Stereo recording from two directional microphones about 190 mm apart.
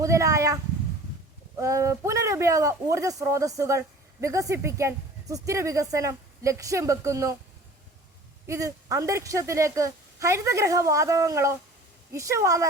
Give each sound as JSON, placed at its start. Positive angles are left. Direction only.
{"t": 0.0, "sound": "a man's voice", "side_deg": -15}
{"t": 8.4, "sound": "a man's voice", "side_deg": -15}